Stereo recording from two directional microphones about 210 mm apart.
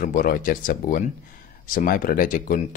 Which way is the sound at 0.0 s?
40° left (ahead or behind).